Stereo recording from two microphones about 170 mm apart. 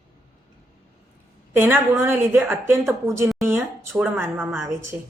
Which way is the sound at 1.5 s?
15° right (ahead or behind).